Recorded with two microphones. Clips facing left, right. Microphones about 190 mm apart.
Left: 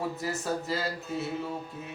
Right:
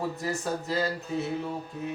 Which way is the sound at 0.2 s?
Centre (ahead or behind).